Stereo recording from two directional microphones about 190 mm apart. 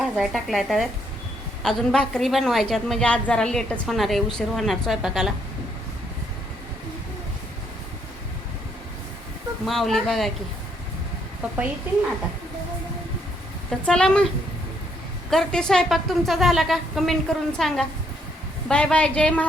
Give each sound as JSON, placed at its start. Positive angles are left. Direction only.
{"t": 0.0, "sound": "a woman's voice", "side_deg": 0}
{"t": 9.6, "sound": "a woman's voice", "side_deg": 0}
{"t": 13.7, "sound": "a woman's voice", "side_deg": 5}
{"t": 15.3, "sound": "a woman's voice", "side_deg": 5}